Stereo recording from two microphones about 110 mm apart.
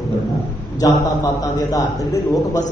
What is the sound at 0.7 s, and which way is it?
A man's voice, 30° left (ahead or behind).